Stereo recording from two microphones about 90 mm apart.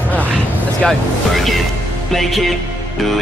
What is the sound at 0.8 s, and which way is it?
Speech, 5° left (ahead or behind).